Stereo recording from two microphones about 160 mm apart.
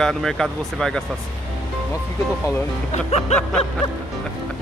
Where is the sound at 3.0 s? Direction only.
40° left (ahead or behind).